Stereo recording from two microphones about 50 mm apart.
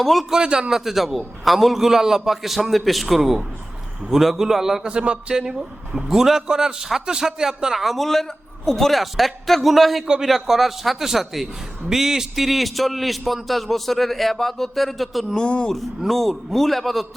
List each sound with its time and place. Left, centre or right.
0.0 s a man's voice: centre
0.3 s a man's voice: centre
0.7 s a man's voice: centre
15.4 s speech: centre
16.0 s a man's voice: centre